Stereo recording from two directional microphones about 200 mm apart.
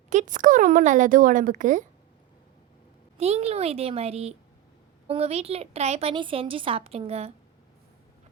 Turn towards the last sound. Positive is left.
turn(degrees=-30)  # may be behind; listen again after turning